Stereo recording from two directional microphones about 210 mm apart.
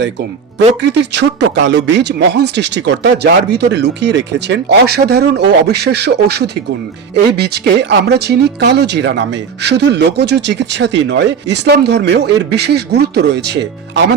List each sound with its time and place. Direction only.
0.8 s speech: 55° right (ahead or behind)